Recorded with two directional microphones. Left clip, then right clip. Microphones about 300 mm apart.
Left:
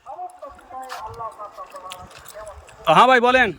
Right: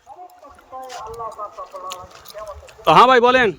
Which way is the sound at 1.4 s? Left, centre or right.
Centre.